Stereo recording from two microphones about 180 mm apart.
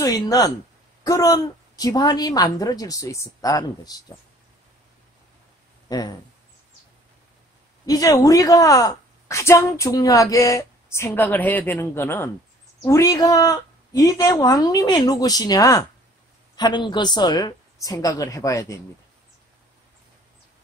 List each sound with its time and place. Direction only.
0.0 s a woman's voice: 20° left (ahead or behind)
5.9 s speech: 20° left (ahead or behind)
7.8 s a woman's voice: 20° left (ahead or behind)